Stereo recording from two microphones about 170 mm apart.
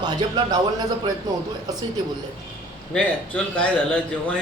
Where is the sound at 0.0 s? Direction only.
25° right (ahead or behind).